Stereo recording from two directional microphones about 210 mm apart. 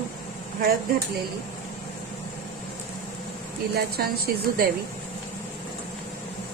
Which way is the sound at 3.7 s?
50° right (ahead or behind).